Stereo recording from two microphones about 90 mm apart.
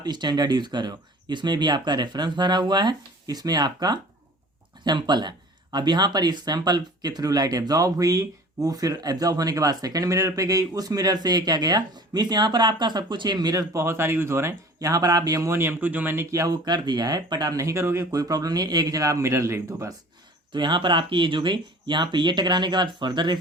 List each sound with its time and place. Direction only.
0.0 s speech: 55° right (ahead or behind)
13.7 s speech: 30° right (ahead or behind)
14.8 s speech: 40° right (ahead or behind); by 16.2 s 20° right (ahead or behind)
16.3 s speech: 40° right (ahead or behind)
16.6 s speech: 55° right (ahead or behind)
17.6 s speech: 30° right (ahead or behind)
20.5 s speech: 60° right (ahead or behind)